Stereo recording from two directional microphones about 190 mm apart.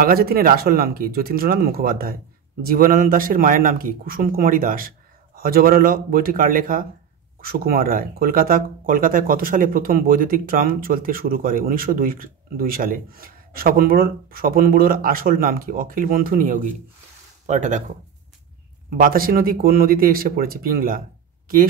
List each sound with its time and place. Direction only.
0.0 s speech: 50° right (ahead or behind)
18.9 s speech: 50° right (ahead or behind)